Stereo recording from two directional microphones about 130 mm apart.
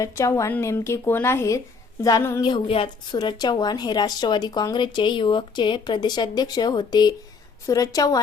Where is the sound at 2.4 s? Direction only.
40° left (ahead or behind).